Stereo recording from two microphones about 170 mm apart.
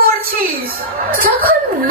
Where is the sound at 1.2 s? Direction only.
60° right (ahead or behind).